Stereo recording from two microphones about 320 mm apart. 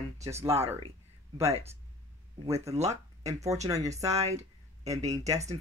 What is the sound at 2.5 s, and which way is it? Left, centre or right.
Speech, centre.